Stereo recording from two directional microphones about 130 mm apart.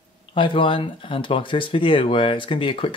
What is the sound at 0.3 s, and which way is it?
Speech, 40° left (ahead or behind).